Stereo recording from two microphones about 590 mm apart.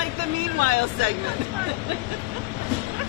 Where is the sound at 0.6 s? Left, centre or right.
Right.